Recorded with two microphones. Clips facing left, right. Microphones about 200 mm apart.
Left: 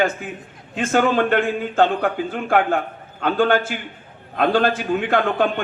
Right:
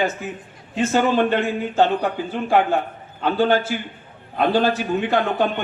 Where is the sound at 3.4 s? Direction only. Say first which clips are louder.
Even; 50° left (ahead or behind).